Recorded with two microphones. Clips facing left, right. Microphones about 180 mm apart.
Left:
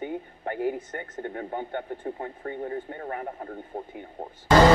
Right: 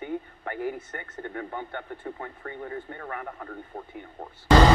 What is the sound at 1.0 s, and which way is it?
Speech, 25° left (ahead or behind).